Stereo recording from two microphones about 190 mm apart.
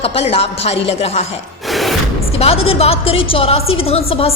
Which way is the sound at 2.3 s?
30° left (ahead or behind).